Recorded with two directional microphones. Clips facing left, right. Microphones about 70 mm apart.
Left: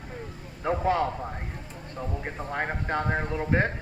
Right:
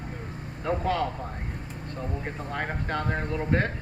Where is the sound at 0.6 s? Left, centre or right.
Centre.